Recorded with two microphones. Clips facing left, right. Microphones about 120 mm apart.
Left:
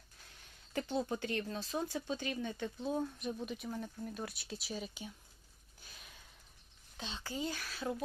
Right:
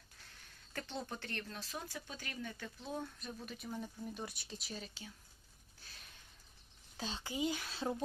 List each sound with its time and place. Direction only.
0.7 s speech: 15° left (ahead or behind)
3.2 s speech: 5° left (ahead or behind)
6.9 s speech: 40° right (ahead or behind)
7.3 s speech: 15° right (ahead or behind)